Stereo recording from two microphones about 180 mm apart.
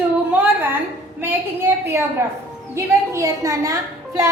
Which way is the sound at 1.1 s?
10° right (ahead or behind).